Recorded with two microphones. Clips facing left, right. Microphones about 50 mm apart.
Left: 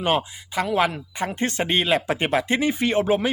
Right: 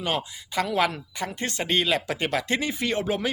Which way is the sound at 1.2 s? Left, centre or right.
Left.